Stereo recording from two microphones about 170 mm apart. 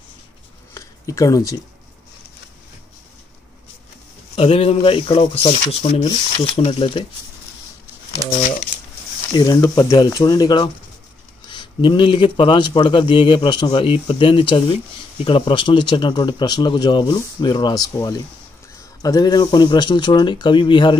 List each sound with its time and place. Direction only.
0.7 s a sound: 20° left (ahead or behind)
4.4 s speech: 35° left (ahead or behind)
8.4 s speech: 50° left (ahead or behind)
9.3 s a man's voice: 25° left (ahead or behind)